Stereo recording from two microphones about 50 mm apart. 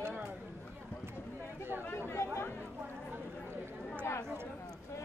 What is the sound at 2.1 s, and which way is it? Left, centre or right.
Chatter, left.